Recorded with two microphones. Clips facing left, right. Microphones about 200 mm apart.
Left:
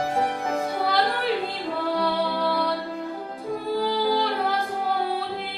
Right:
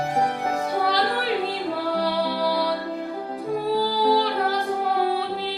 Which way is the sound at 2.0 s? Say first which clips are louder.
Even; 35° right (ahead or behind).